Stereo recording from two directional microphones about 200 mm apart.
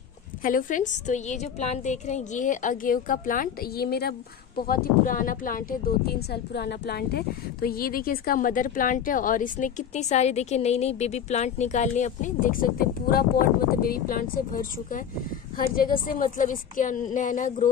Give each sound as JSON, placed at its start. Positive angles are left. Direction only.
{"t": 0.4, "sound": "a woman's voice", "side_deg": 45}